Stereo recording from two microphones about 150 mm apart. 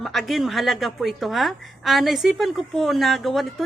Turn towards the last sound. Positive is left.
turn(degrees=0)  # may be behind; listen again after turning